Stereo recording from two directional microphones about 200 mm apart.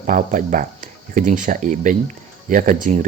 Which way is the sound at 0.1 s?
40° right (ahead or behind).